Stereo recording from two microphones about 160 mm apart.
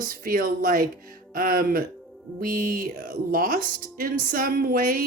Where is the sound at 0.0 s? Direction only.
60° right (ahead or behind).